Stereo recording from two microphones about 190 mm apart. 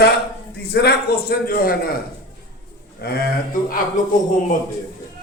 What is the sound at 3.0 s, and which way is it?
Speech, 55° left (ahead or behind).